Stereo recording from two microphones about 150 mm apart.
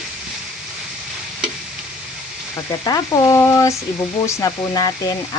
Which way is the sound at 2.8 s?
25° left (ahead or behind).